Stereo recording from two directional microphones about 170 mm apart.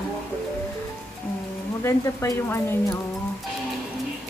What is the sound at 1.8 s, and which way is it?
Speech, 15° left (ahead or behind).